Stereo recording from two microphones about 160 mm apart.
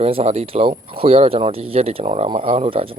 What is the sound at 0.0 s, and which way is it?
Speech, 40° right (ahead or behind).